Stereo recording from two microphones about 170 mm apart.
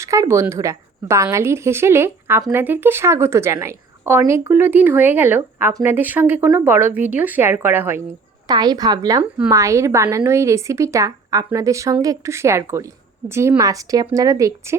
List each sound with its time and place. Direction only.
0.0 s a woman's voice: 15° right (ahead or behind)
8.4 s a woman's voice: 25° right (ahead or behind)